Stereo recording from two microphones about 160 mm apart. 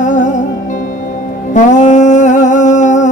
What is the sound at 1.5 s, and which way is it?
Music, 50° left (ahead or behind).